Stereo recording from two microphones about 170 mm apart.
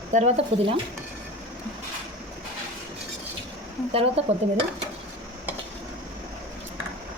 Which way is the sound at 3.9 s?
35° right (ahead or behind).